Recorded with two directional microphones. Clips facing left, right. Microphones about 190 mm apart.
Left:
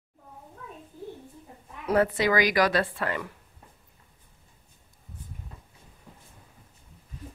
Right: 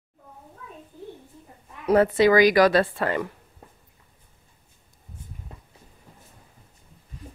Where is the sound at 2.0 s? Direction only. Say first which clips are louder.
Right 6 dB; 30° right (ahead or behind).